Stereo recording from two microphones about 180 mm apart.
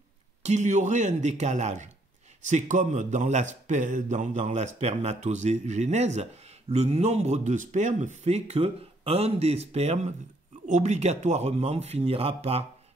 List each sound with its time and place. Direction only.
0.4 s speech: 40° right (ahead or behind)